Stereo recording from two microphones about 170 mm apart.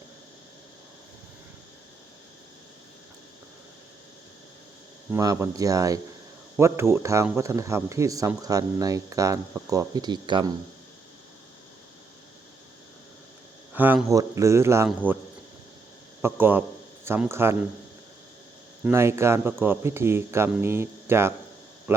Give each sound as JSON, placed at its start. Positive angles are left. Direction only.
{"t": 5.1, "sound": "speech", "side_deg": -20}
{"t": 13.7, "sound": "speech", "side_deg": -10}
{"t": 16.2, "sound": "speech", "side_deg": -10}
{"t": 18.9, "sound": "speech", "side_deg": -15}